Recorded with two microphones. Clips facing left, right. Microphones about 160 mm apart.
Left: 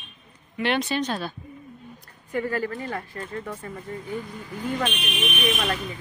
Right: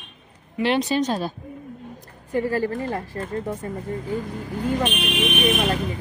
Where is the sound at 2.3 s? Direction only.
35° right (ahead or behind).